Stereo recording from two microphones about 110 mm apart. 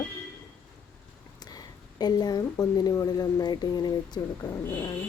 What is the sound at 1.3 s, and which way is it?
Speech, 40° left (ahead or behind).